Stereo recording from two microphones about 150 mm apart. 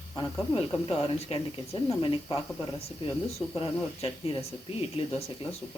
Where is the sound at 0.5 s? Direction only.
40° left (ahead or behind).